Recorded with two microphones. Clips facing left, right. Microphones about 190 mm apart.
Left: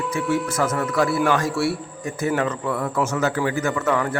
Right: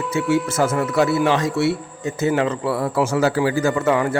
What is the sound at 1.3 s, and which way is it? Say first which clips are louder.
A man's voice: right 2 dB; 20° right (ahead or behind).